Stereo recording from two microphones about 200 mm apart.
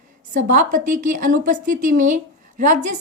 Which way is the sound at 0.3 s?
40° right (ahead or behind).